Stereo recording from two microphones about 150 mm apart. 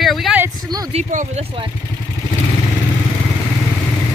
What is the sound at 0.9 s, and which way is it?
Speech, 45° right (ahead or behind).